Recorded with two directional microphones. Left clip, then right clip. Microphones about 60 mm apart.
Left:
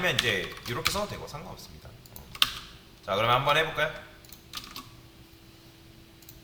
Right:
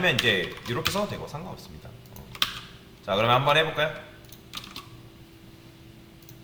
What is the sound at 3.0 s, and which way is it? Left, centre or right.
Speech, left.